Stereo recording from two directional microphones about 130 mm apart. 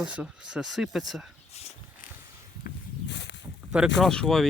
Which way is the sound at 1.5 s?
55° left (ahead or behind).